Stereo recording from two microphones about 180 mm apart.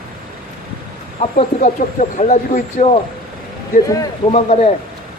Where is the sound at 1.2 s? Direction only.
45° left (ahead or behind).